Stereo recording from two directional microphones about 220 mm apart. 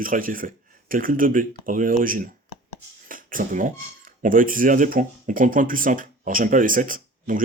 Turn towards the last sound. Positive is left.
turn(degrees=-40)  # may be behind; listen again after turning